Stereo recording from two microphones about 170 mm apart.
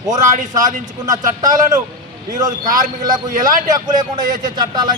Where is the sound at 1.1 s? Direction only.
20° right (ahead or behind).